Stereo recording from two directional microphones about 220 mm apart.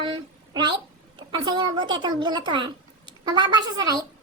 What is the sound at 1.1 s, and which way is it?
A woman's voice, 20° right (ahead or behind).